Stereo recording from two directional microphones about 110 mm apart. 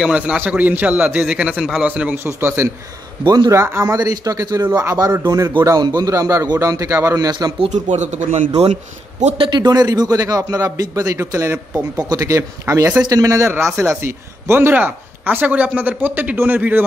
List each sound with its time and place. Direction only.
0.0 s speech: 10° right (ahead or behind)
3.3 s a man's voice: 40° right (ahead or behind)
3.5 s a man's voice: 25° right (ahead or behind)
7.2 s a man's voice: 40° right (ahead or behind)
7.7 s a man's voice: 90° right
9.4 s a man's voice: 40° right (ahead or behind); by 16.8 s 15° right (ahead or behind)